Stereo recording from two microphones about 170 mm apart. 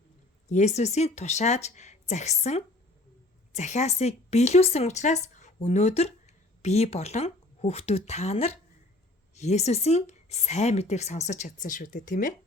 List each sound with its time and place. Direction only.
0.4 s a woman's voice: 45° left (ahead or behind)